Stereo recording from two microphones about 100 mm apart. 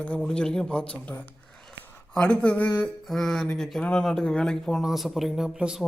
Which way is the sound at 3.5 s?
5° left (ahead or behind).